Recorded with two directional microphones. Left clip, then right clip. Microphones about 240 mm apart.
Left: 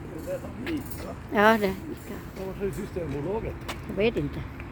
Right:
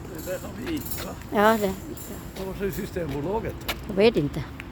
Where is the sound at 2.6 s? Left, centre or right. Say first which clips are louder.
Right 2 dB; right.